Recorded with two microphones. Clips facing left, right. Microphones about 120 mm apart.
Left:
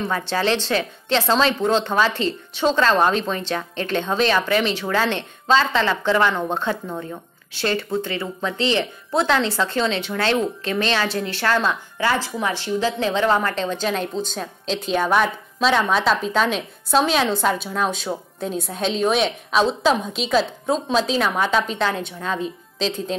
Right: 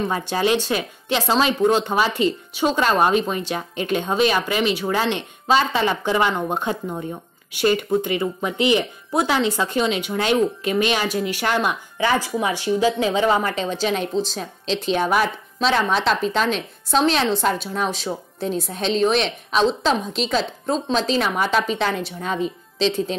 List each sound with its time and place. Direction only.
0.0 s a woman's voice: 15° right (ahead or behind)